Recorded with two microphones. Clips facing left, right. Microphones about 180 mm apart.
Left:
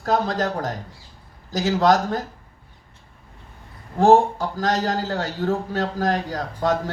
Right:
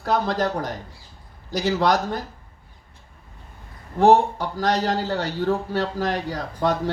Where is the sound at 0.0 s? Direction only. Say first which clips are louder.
Even; 45° left (ahead or behind).